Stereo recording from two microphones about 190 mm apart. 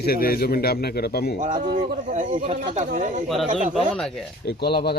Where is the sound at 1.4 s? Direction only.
40° right (ahead or behind).